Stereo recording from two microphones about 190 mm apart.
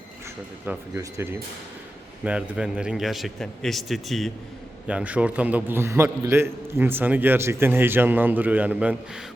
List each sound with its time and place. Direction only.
0.6 s a man's voice: 10° right (ahead or behind)